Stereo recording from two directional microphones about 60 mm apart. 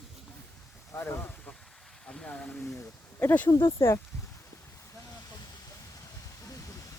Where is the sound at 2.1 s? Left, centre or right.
Centre.